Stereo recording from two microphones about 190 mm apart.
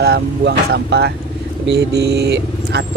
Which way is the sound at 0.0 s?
55° right (ahead or behind).